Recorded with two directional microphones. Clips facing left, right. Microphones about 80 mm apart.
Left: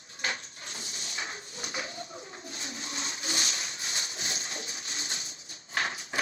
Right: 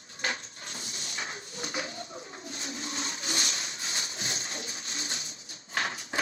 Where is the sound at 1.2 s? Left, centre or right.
Right.